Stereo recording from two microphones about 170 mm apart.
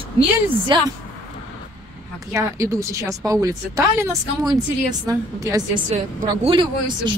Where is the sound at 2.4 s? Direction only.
20° right (ahead or behind).